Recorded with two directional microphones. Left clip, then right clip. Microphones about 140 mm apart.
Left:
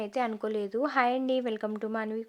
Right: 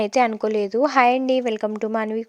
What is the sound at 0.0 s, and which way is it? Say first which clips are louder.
Speech: right 12 dB; 50° right (ahead or behind).